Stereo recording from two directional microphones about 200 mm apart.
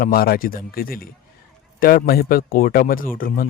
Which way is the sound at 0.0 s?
50° left (ahead or behind).